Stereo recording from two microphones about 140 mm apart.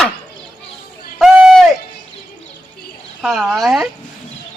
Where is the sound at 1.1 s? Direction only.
5° right (ahead or behind).